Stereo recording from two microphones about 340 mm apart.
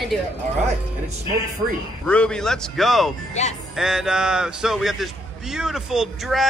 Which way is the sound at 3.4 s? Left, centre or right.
Centre.